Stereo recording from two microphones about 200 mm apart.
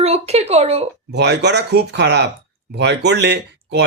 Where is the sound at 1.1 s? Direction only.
55° right (ahead or behind).